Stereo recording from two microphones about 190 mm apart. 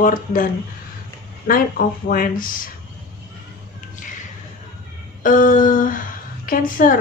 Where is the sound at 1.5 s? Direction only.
50° left (ahead or behind).